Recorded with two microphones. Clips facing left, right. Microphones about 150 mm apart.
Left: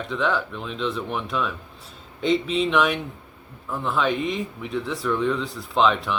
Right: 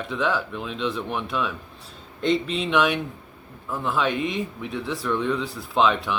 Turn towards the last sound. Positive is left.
turn(degrees=0)  # may be behind; listen again after turning